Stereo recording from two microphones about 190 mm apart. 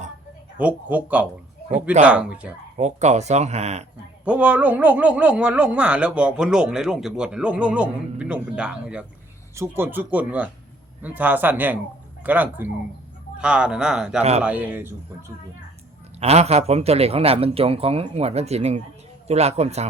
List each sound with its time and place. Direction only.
0.6 s speech: 10° right (ahead or behind)
2.7 s speech: 35° right (ahead or behind)
4.3 s speech: 5° right (ahead or behind)
14.2 s speech: 35° right (ahead or behind)
14.4 s speech: 10° right (ahead or behind)
16.2 s speech: 35° right (ahead or behind)